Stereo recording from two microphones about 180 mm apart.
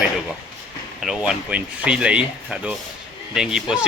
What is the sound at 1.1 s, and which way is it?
Speech, 5° right (ahead or behind).